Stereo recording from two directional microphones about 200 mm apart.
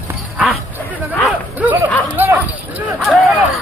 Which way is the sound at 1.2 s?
10° right (ahead or behind).